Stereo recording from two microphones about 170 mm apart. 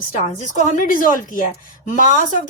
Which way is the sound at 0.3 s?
50° left (ahead or behind).